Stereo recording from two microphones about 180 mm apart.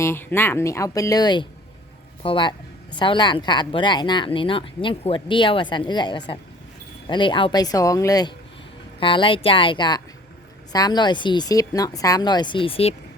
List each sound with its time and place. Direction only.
0.0 s a woman's voice: 10° left (ahead or behind); by 12.9 s 30° left (ahead or behind)